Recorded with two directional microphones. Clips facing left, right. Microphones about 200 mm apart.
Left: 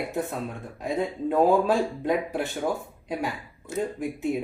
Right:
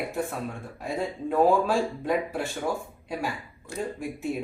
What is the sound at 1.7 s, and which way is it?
Speech, 20° left (ahead or behind).